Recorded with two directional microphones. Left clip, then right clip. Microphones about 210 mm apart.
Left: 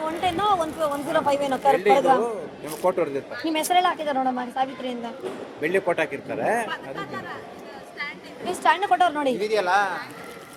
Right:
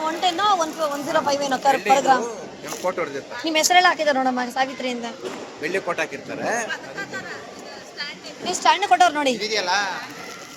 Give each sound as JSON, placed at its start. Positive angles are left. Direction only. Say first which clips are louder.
{"t": 0.0, "sound": "speech", "louder": "right 3 dB", "side_deg": 10}
{"t": 3.4, "sound": "a woman's voice", "louder": "right 5 dB", "side_deg": 0}
{"t": 5.6, "sound": "a man's voice", "louder": "left 2 dB", "side_deg": 45}
{"t": 8.6, "sound": "a woman's voice", "louder": "right 3 dB", "side_deg": 5}
{"t": 9.4, "sound": "a man's voice", "louder": "left 1 dB", "side_deg": 35}